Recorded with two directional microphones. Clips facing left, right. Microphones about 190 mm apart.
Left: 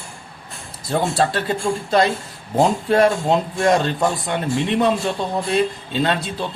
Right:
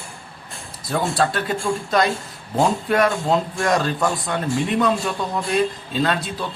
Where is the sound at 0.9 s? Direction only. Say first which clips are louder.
Left 2 dB; 30° left (ahead or behind).